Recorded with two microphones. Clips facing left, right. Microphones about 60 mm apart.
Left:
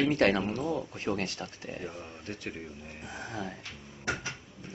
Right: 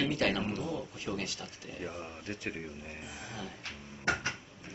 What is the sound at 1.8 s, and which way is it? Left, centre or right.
Speech, centre.